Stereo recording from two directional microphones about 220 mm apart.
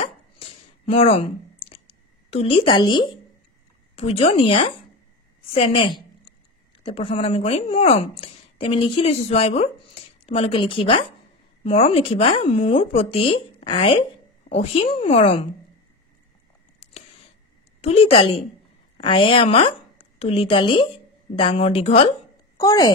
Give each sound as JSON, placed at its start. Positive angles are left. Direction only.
{"t": 0.0, "sound": "a sound", "side_deg": 25}
{"t": 3.9, "sound": "a woman's voice", "side_deg": 30}
{"t": 17.9, "sound": "speech", "side_deg": 25}
{"t": 22.6, "sound": "a woman's voice", "side_deg": 15}